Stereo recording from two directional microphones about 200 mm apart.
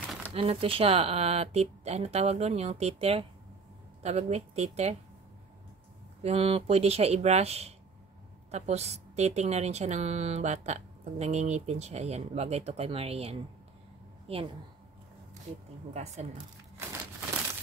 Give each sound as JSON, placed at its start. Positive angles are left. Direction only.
{"t": 0.0, "sound": "a sound", "side_deg": 5}
{"t": 0.3, "sound": "a woman's voice", "side_deg": -30}
{"t": 6.2, "sound": "a woman's voice", "side_deg": -30}
{"t": 15.9, "sound": "a woman's voice", "side_deg": -35}